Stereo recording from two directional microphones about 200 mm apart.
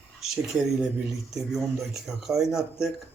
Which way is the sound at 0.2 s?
Centre (ahead or behind).